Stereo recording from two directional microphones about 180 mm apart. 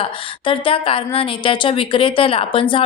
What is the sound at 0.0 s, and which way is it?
Speech, 30° left (ahead or behind).